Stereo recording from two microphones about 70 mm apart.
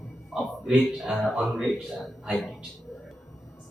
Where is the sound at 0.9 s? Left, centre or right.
Centre.